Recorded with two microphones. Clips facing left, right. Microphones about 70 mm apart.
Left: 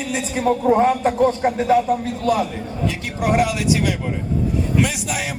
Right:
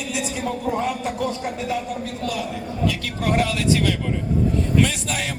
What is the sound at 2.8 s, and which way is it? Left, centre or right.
A man's voice, centre.